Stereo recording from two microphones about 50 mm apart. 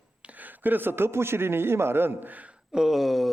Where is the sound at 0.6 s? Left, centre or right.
Right.